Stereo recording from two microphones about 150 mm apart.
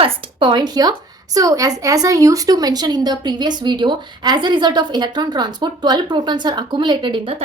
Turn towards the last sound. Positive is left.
turn(degrees=-35)  # may be behind; listen again after turning